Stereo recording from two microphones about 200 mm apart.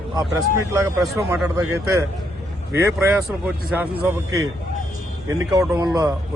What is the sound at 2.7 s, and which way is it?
Speech, 10° right (ahead or behind).